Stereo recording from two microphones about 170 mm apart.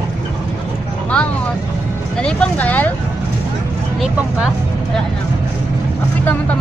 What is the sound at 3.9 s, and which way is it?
Speech, 5° right (ahead or behind).